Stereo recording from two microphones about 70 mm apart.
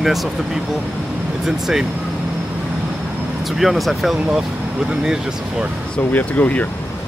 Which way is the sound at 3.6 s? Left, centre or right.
Centre.